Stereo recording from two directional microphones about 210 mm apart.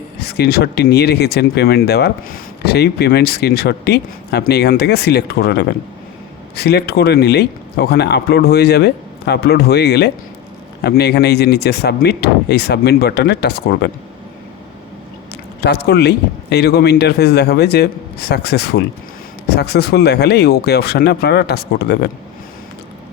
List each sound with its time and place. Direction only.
0.2 s speech: 50° left (ahead or behind)
15.6 s speech: 50° left (ahead or behind)